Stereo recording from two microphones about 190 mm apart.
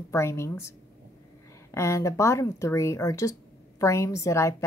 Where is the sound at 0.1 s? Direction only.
15° left (ahead or behind).